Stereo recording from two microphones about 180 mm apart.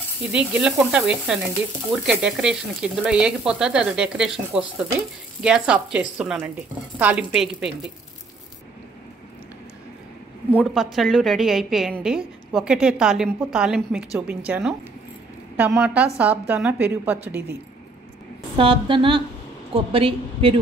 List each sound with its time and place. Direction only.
0.3 s frying: 5° right (ahead or behind)
7.0 s a woman's voice: 10° right (ahead or behind)
10.5 s frying: 5° left (ahead or behind)
15.5 s a woman's voice: 10° right (ahead or behind)
18.6 s a woman's voice: 30° right (ahead or behind)